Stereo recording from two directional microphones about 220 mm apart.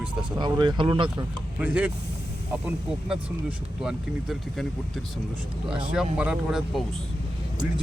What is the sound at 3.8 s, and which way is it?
Speech, centre (ahead or behind).